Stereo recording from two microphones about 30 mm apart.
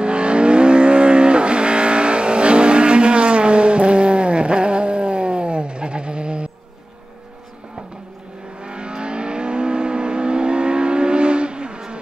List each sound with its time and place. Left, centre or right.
0.0 s vehicle: right
8.5 s vehicle: right